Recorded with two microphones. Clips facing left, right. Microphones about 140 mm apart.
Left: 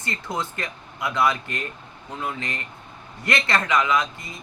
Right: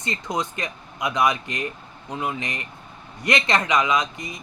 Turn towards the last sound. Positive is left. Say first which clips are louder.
# even
turn(degrees=-20)  # may be behind; listen again after turning